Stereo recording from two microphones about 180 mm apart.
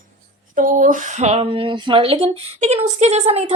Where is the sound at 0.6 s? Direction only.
50° right (ahead or behind).